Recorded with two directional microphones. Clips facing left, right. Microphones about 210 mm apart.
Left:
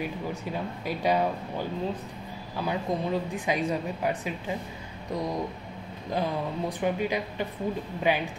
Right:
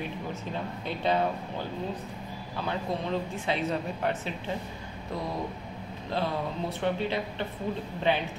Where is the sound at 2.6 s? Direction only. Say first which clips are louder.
Left 3 dB; 10° left (ahead or behind).